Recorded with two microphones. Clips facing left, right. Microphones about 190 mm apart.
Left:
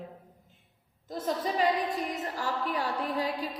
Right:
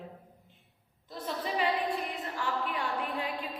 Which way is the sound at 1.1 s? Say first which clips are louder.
Left 4 dB; 45° left (ahead or behind).